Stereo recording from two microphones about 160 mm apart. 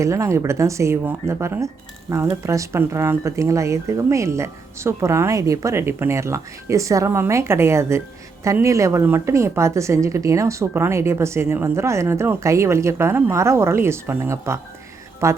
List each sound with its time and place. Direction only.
0.0 s a woman's voice: 20° right (ahead or behind)